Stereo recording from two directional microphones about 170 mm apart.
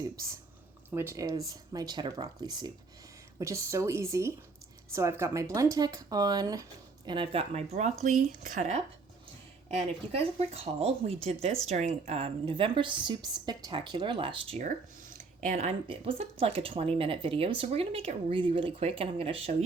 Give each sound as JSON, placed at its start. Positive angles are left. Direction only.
{"t": 0.9, "sound": "speech", "side_deg": -15}
{"t": 14.7, "sound": "speech", "side_deg": -45}